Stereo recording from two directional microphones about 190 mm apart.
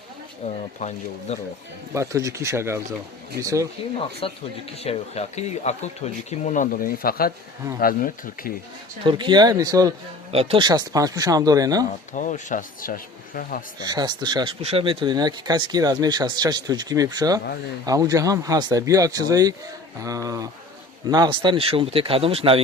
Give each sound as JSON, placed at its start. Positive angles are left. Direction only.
{"t": 0.4, "sound": "speech", "side_deg": 35}
{"t": 1.9, "sound": "speech", "side_deg": -15}
{"t": 4.2, "sound": "speech", "side_deg": 30}
{"t": 9.0, "sound": "speech", "side_deg": -25}
{"t": 12.1, "sound": "speech", "side_deg": 40}
{"t": 13.8, "sound": "speech", "side_deg": -20}